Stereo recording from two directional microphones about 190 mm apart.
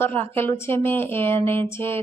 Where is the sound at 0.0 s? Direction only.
10° left (ahead or behind).